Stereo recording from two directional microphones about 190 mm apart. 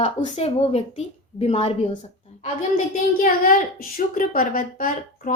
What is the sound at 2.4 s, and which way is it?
A woman's voice, 45° left (ahead or behind).